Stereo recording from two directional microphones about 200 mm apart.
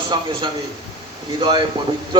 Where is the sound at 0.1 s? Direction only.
20° right (ahead or behind).